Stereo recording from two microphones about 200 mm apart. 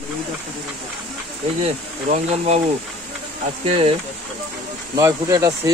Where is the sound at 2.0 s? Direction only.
35° right (ahead or behind).